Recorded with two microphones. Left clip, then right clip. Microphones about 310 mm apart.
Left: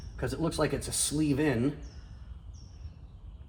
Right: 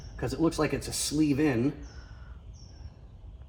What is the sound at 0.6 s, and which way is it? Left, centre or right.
Speech, centre.